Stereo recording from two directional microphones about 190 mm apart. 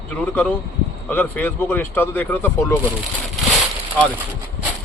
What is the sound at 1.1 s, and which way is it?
Speech, 10° left (ahead or behind).